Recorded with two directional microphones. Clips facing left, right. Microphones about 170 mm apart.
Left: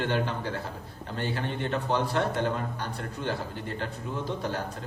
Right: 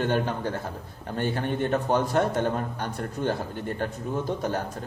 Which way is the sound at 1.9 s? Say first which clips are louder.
Right 2 dB; 45° right (ahead or behind).